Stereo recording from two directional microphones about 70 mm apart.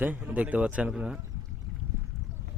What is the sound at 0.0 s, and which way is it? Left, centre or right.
Speech, right.